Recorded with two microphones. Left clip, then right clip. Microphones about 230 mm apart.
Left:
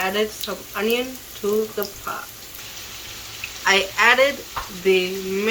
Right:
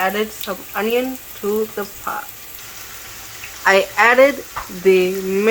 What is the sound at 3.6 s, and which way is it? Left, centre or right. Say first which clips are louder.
Speech: right 3 dB; right.